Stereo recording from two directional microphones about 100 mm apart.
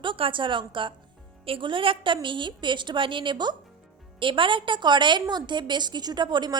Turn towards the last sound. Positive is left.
turn(degrees=-50)  # may be behind; listen again after turning